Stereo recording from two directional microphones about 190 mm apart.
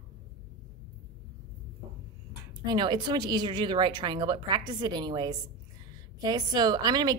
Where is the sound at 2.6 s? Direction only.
25° right (ahead or behind).